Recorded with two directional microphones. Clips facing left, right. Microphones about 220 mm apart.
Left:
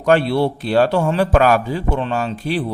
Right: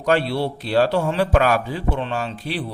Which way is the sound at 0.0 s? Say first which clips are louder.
Left 5 dB; 55° left (ahead or behind).